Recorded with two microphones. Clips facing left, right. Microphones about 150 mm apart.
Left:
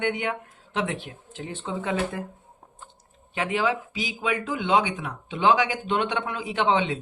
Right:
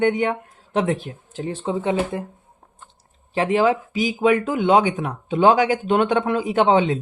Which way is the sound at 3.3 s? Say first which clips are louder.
Right 7 dB; 35° right (ahead or behind).